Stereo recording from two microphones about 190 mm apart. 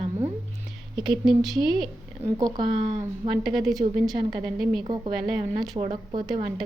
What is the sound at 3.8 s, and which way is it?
Speech, 35° right (ahead or behind).